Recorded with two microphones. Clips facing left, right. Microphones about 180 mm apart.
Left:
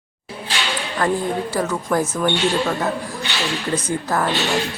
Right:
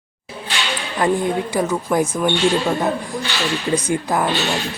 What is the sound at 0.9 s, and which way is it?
A man's voice, 15° right (ahead or behind).